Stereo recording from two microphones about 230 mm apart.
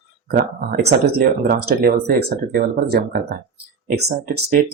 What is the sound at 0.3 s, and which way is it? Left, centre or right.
Speech, right.